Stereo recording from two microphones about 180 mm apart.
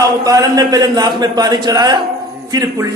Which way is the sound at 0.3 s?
20° right (ahead or behind).